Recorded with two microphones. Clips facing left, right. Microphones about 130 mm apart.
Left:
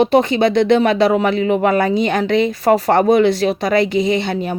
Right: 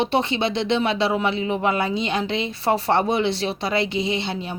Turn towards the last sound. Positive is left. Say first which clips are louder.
# left 8 dB
turn(degrees=50)  # may be behind; listen again after turning